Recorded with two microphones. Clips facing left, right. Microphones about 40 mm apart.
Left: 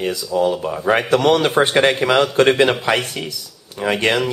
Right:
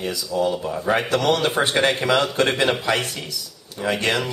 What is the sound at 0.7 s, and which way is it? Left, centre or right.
Speech, left.